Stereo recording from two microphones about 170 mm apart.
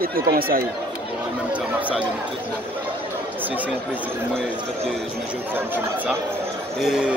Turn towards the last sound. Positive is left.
turn(degrees=-5)  # may be behind; listen again after turning